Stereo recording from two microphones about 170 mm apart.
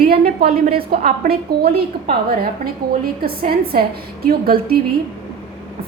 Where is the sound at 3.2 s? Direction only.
65° right (ahead or behind).